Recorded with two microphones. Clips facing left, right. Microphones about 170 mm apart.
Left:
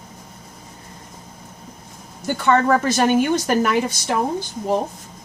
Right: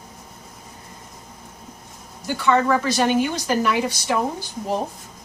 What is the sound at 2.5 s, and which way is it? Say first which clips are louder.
A woman's voice: left 2 dB; 50° left (ahead or behind).